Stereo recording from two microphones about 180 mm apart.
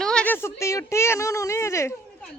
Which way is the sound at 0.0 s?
5° left (ahead or behind).